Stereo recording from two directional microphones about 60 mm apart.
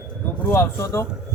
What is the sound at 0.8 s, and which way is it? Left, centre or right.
Speech, left.